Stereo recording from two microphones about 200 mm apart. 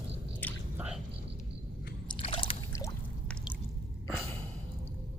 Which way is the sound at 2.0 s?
25° left (ahead or behind).